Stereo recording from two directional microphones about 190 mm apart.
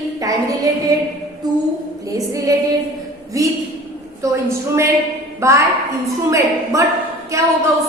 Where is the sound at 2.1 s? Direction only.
20° right (ahead or behind).